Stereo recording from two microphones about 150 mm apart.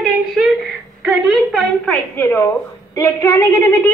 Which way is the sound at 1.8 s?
15° left (ahead or behind).